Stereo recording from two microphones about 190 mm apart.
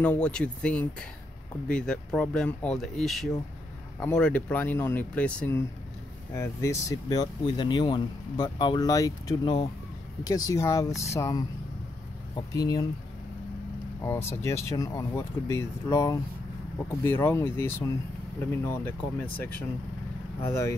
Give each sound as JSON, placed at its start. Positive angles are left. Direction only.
{"t": 0.0, "sound": "speech", "side_deg": 5}
{"t": 14.0, "sound": "speech", "side_deg": 15}